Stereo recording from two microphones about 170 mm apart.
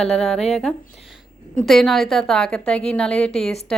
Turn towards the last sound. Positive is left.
turn(degrees=5)  # may be behind; listen again after turning